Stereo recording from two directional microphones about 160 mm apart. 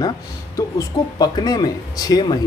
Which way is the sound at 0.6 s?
25° left (ahead or behind).